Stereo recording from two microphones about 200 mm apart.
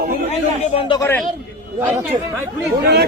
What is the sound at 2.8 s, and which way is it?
Speech, 50° right (ahead or behind).